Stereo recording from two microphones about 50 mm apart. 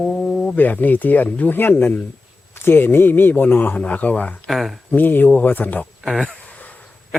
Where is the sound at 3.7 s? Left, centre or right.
Left.